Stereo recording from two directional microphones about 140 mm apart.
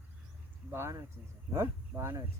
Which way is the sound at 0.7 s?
15° right (ahead or behind).